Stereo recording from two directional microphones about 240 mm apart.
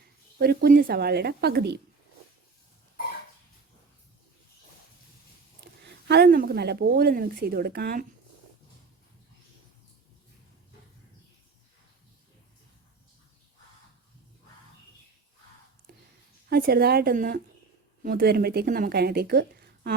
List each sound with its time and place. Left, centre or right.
0.3 s speech: right
5.5 s speech: right
15.9 s a sound: right
16.5 s speech: right